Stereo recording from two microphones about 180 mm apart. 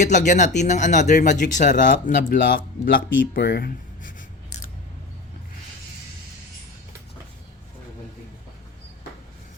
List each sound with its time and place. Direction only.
0.0 s speech: 40° left (ahead or behind); by 4.1 s 60° left (ahead or behind)